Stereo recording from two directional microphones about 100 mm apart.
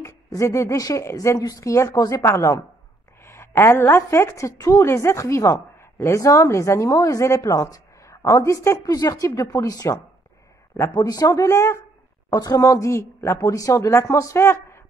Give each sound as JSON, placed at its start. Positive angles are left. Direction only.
{"t": 0.0, "sound": "a woman's voice", "side_deg": 30}
{"t": 12.3, "sound": "speech", "side_deg": 40}